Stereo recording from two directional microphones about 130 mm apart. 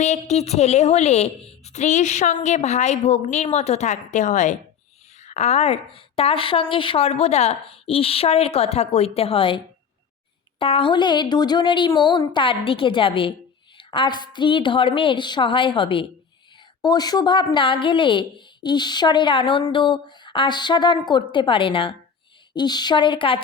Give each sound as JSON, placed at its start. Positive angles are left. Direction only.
{"t": 0.0, "sound": "a woman's voice", "side_deg": 60}
{"t": 10.6, "sound": "a woman's voice", "side_deg": 45}